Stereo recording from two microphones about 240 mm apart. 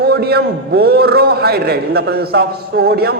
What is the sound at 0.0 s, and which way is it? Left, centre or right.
A man's voice, right.